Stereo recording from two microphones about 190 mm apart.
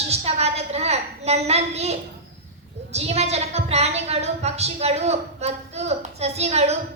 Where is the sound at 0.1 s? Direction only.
35° right (ahead or behind).